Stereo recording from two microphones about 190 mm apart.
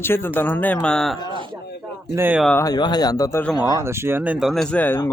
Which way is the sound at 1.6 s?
60° left (ahead or behind).